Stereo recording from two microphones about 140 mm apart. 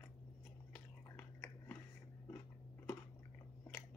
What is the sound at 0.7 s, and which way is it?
Biting, 10° left (ahead or behind).